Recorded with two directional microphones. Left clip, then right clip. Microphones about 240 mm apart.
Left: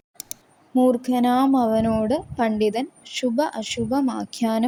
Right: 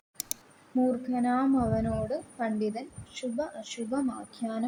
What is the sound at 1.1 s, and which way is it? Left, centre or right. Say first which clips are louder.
A woman's voice: left 8 dB; left.